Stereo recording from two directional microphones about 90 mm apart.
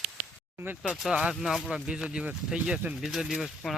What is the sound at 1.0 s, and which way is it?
Speech, 10° right (ahead or behind).